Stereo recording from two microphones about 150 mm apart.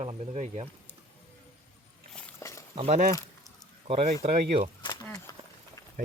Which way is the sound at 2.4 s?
20° left (ahead or behind).